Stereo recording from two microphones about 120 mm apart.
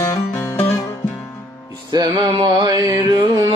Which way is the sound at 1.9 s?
35° right (ahead or behind).